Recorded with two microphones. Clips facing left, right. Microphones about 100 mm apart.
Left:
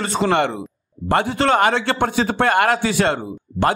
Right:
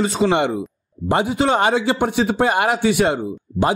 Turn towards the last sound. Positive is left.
turn(degrees=-10)  # may be behind; listen again after turning